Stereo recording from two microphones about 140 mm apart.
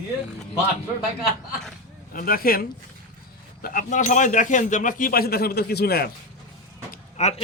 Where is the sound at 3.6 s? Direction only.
70° left (ahead or behind); by 5.5 s 90° left.